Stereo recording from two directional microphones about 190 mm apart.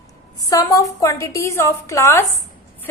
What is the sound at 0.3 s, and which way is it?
A woman's voice, 20° left (ahead or behind).